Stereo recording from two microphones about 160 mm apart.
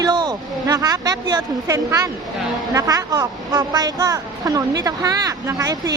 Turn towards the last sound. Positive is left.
turn(degrees=-20)  # may be behind; listen again after turning